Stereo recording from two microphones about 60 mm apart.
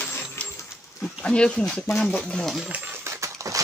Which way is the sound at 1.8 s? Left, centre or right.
Left.